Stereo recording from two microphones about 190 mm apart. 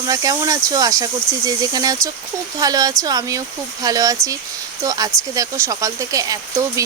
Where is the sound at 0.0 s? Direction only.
20° right (ahead or behind).